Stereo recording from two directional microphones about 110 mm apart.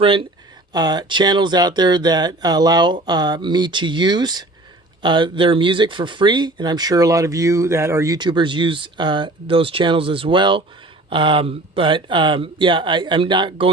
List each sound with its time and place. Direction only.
0.0 s speech: 55° right (ahead or behind)
0.7 s speech: 40° right (ahead or behind)
8.2 s speech: 45° right (ahead or behind)